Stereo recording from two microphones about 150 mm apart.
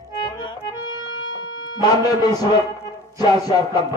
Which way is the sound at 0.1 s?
30° left (ahead or behind).